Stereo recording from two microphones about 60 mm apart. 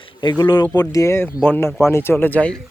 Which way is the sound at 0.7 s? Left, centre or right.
Left.